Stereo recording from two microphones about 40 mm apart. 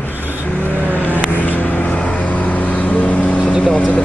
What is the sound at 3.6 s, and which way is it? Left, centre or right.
Speech, left.